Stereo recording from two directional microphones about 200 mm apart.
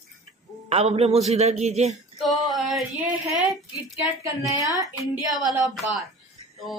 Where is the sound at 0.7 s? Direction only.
30° right (ahead or behind).